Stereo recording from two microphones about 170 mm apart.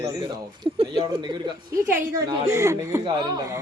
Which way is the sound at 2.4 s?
15° right (ahead or behind).